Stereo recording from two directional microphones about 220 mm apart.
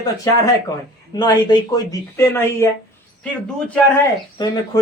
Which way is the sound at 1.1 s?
20° left (ahead or behind).